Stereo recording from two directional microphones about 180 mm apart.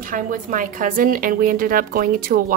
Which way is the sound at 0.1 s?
50° right (ahead or behind).